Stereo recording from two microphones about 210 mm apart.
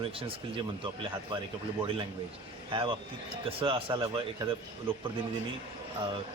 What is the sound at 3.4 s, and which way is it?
Speech, 25° right (ahead or behind).